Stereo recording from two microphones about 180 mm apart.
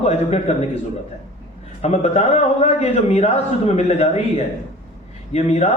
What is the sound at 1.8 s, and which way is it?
A man's voice, 35° left (ahead or behind).